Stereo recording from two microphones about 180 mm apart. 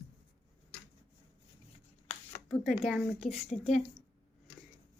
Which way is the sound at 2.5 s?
Centre (ahead or behind).